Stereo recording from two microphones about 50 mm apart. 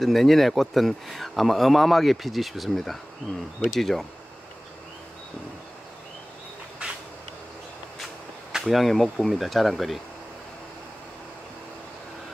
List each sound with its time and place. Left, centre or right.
0.0 s speech: centre
8.6 s speech: centre